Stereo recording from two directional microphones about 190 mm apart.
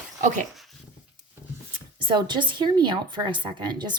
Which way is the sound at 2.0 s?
25° right (ahead or behind).